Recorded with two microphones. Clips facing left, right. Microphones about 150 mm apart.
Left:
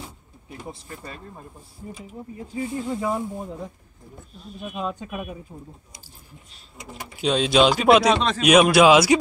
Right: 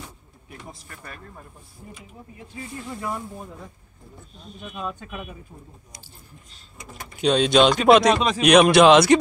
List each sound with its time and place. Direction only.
0.5 s speech: 25° left (ahead or behind)
2.5 s speech: 15° left (ahead or behind)
4.5 s speech: 5° left (ahead or behind)
4.7 s speech: 15° left (ahead or behind)
7.0 s speech: 5° left (ahead or behind)